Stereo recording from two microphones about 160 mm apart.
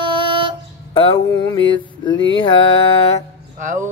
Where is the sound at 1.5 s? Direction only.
25° left (ahead or behind).